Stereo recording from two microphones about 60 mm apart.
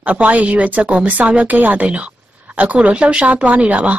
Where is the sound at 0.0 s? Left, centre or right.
Right.